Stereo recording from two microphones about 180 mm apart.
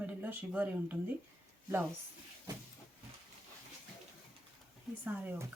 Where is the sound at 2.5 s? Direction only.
25° right (ahead or behind).